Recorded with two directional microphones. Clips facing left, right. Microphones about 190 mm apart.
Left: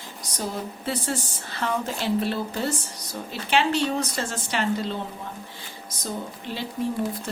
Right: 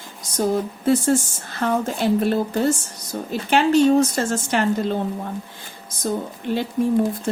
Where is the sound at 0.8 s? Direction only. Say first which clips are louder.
Right 11 dB; 45° right (ahead or behind).